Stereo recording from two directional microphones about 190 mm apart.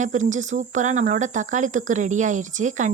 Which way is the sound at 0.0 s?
40° right (ahead or behind).